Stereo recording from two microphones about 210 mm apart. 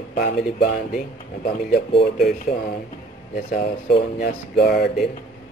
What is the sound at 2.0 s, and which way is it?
Speech, 50° left (ahead or behind).